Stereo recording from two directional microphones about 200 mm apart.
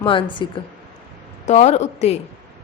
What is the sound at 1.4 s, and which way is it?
Speech, 35° left (ahead or behind).